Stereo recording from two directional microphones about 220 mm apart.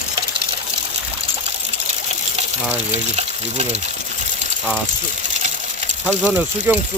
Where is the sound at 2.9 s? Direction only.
30° right (ahead or behind).